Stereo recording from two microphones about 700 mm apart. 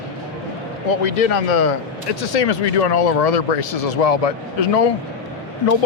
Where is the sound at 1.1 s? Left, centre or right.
Left.